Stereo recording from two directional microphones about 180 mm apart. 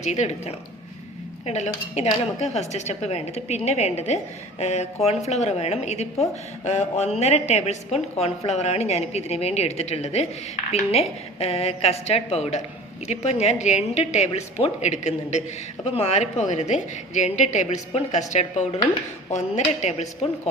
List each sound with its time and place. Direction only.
0.0 s a woman's voice: 40° left (ahead or behind)